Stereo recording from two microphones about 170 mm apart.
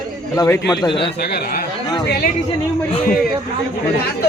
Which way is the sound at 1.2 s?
70° left (ahead or behind).